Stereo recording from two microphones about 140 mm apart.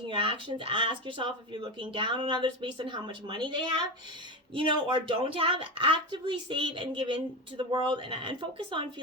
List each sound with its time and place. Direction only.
0.1 s speech: 40° right (ahead or behind)